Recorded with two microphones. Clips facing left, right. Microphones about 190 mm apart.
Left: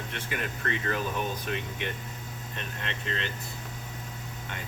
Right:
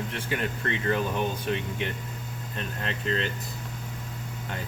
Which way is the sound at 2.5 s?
40° right (ahead or behind).